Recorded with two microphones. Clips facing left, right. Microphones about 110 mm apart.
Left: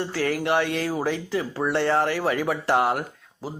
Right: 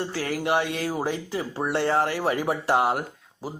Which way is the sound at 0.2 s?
25° right (ahead or behind).